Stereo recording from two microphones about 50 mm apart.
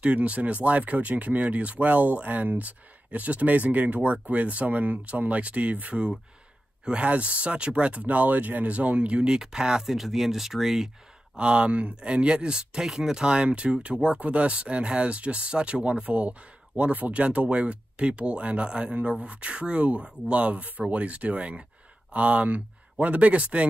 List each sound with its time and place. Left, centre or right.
0.0 s speech: right; by 10.9 s centre
11.3 s speech: right